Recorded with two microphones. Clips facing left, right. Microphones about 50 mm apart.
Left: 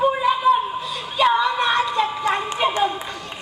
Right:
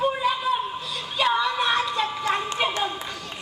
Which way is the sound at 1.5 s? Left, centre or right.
Centre.